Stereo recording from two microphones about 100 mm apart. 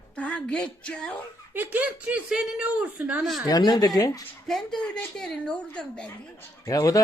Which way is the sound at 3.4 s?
40° left (ahead or behind).